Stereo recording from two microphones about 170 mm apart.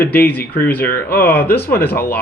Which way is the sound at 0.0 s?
10° left (ahead or behind).